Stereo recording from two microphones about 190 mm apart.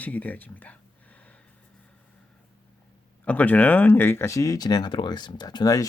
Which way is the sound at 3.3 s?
10° left (ahead or behind).